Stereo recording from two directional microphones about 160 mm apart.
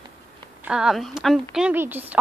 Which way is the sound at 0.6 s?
5° right (ahead or behind).